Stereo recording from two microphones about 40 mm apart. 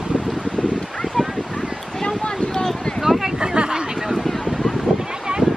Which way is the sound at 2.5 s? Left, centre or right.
Centre.